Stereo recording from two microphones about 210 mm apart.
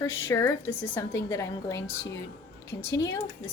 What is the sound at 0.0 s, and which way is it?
A woman's voice, 15° left (ahead or behind).